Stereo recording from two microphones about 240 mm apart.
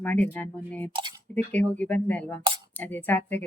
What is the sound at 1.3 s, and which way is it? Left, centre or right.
Speech, centre.